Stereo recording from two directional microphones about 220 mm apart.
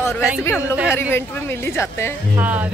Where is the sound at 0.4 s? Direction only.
10° left (ahead or behind).